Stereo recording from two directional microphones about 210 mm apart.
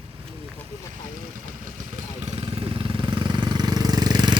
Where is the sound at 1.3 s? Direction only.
40° right (ahead or behind); by 4.4 s 20° right (ahead or behind).